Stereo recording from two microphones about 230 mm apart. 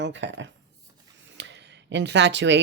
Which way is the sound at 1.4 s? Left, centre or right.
Right.